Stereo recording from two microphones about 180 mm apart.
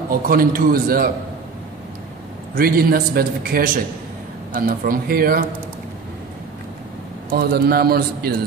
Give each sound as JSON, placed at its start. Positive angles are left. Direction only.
{"t": 0.1, "sound": "a man's voice", "side_deg": -50}
{"t": 2.5, "sound": "a man's voice", "side_deg": -55}
{"t": 7.3, "sound": "a man's voice", "side_deg": -55}